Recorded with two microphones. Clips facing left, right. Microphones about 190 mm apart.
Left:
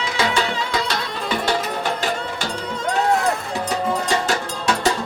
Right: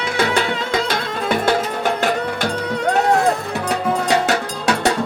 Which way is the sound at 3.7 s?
65° right (ahead or behind).